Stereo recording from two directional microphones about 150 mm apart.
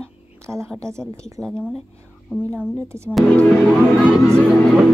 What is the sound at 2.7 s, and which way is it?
Speech, 20° right (ahead or behind).